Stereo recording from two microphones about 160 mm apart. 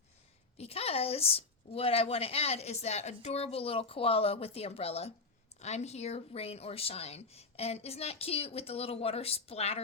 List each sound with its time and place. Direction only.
0.6 s a woman's voice: 40° left (ahead or behind)